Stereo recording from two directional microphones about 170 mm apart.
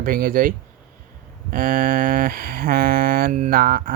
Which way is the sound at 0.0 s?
55° right (ahead or behind).